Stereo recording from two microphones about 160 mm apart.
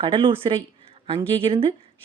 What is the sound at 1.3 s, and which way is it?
Speech, 35° right (ahead or behind).